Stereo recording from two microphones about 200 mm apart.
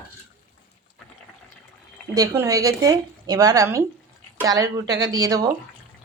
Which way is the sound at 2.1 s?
15° right (ahead or behind).